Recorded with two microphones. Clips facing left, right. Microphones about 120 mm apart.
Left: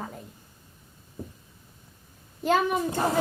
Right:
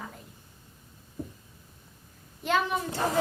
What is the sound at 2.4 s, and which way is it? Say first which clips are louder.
Speech: left 4 dB; 45° left (ahead or behind).